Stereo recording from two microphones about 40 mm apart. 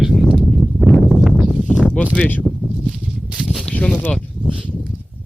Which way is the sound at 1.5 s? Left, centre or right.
Right.